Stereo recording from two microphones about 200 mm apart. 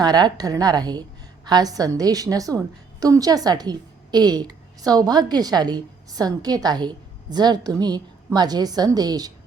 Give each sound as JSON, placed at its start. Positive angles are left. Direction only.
{"t": 0.0, "sound": "a woman's voice", "side_deg": -20}